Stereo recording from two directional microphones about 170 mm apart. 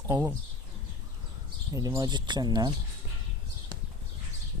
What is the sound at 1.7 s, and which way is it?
Speech, 20° right (ahead or behind).